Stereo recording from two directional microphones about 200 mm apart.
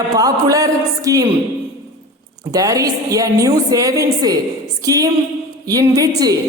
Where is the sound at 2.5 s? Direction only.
15° right (ahead or behind).